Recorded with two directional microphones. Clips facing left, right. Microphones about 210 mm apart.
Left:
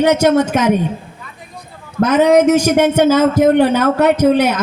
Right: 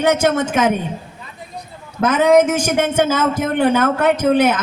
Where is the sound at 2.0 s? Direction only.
50° right (ahead or behind).